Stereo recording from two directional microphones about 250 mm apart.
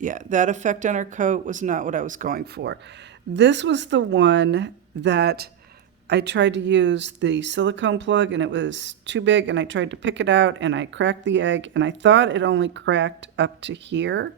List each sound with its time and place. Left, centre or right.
0.0 s speech: right